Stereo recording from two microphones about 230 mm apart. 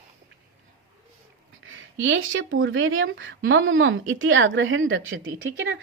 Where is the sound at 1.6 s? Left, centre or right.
Right.